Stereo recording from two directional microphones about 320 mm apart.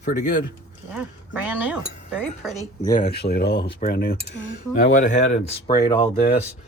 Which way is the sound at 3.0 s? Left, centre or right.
Left.